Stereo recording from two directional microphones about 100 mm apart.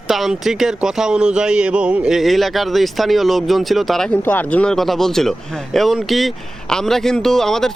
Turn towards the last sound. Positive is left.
turn(degrees=5)  # may be behind; listen again after turning